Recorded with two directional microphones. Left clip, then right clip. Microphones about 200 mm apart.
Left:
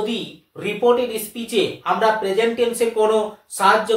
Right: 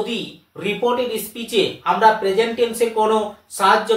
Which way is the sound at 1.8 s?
15° left (ahead or behind).